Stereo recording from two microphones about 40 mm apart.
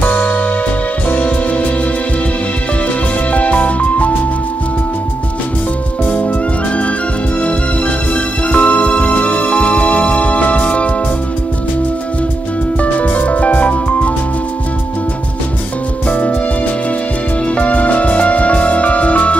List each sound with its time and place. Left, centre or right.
0.0 s music: left
1.1 s music: left
3.3 s music: left
8.1 s music: left
12.8 s music: left
16.1 s music: left
17.6 s music: left